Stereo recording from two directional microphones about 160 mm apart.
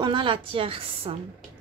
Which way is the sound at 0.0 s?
30° right (ahead or behind).